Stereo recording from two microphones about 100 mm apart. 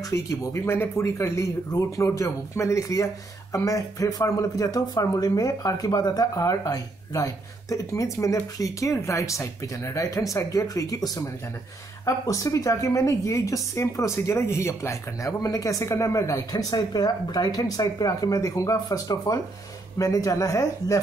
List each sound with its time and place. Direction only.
0.1 s a woman's voice: 30° left (ahead or behind)